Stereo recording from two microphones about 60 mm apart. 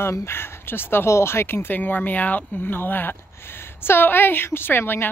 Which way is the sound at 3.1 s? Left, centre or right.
Left.